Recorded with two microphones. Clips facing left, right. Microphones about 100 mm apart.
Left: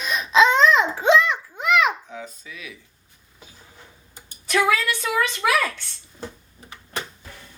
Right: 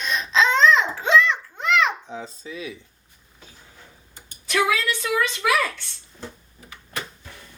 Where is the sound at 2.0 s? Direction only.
30° right (ahead or behind).